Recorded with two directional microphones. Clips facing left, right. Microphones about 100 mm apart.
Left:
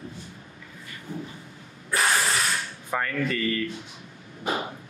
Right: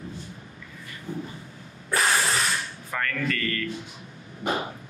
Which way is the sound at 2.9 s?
15° left (ahead or behind).